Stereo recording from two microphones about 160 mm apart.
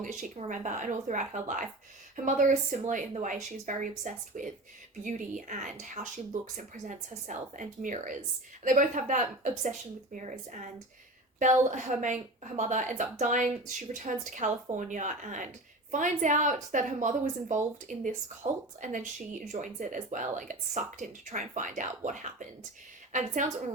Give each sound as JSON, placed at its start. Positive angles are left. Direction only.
{"t": 0.0, "sound": "speech", "side_deg": -50}